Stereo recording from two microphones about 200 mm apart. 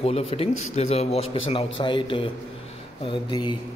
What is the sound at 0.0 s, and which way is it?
A man's voice, 30° left (ahead or behind).